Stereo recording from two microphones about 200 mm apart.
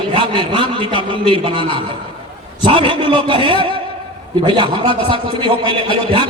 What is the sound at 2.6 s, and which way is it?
A man's voice, 25° right (ahead or behind).